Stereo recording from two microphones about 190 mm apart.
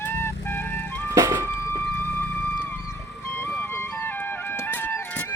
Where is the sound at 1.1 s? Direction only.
15° right (ahead or behind).